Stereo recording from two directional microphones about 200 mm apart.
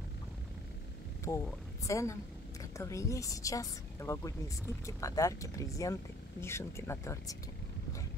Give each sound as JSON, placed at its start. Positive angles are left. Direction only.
{"t": 1.3, "sound": "speech", "side_deg": 15}